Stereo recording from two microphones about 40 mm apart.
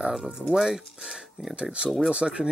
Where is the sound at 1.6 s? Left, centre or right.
Right.